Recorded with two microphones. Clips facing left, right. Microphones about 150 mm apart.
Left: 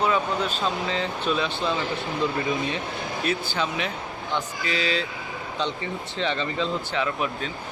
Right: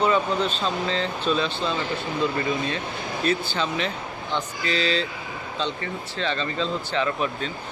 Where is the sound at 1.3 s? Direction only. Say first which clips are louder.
Right 2 dB; 10° left (ahead or behind).